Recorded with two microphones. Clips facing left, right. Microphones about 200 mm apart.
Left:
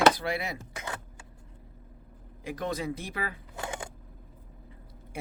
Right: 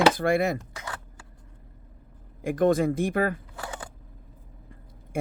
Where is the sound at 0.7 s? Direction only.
20° left (ahead or behind).